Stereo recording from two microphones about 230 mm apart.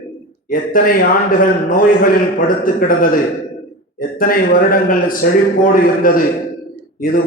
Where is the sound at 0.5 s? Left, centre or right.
Left.